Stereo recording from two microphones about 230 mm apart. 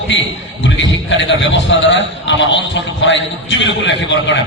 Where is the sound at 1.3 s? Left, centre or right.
Left.